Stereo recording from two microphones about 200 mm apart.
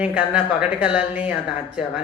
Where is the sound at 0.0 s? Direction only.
5° right (ahead or behind).